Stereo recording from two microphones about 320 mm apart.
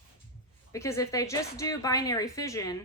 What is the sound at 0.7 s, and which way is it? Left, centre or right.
A woman's voice, centre.